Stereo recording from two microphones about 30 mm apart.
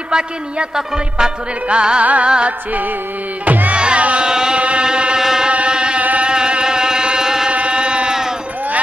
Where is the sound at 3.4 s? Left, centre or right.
Right.